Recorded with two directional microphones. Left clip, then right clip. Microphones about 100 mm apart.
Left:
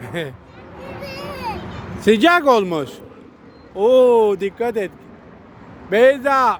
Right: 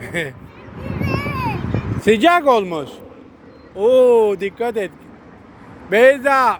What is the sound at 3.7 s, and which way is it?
Speech, 50° left (ahead or behind).